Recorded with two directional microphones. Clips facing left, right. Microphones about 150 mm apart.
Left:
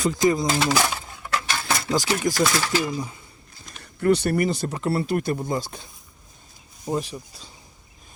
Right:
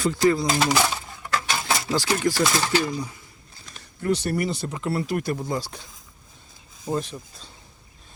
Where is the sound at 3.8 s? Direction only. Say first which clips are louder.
Left 5 dB; 60° left (ahead or behind); by 5.8 s 20° left (ahead or behind).